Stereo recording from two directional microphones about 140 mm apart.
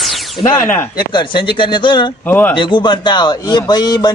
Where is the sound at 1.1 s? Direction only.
35° left (ahead or behind).